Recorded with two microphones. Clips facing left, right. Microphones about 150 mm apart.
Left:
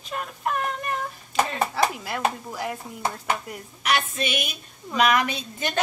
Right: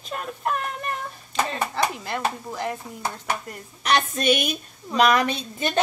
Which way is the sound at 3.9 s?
40° right (ahead or behind).